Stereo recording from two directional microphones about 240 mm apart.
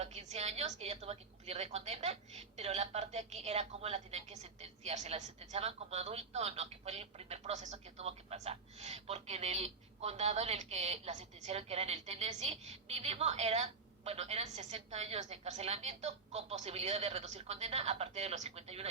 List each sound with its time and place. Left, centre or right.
0.0 s a woman's voice: right